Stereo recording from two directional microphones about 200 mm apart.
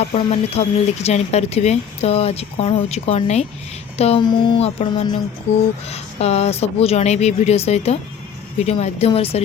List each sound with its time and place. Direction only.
0.0 s speech: 30° left (ahead or behind)